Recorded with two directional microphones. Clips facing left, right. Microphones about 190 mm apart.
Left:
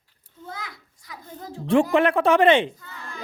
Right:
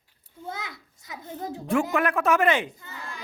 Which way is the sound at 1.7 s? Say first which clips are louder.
Left 6 dB; 30° left (ahead or behind).